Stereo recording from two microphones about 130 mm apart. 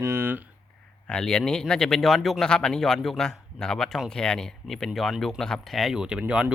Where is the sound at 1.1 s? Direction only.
5° left (ahead or behind).